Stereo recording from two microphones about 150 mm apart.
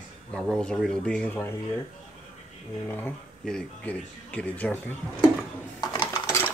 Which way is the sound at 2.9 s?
10° left (ahead or behind).